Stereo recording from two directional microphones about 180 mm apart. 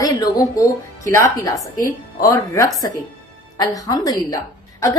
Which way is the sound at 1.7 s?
50° left (ahead or behind).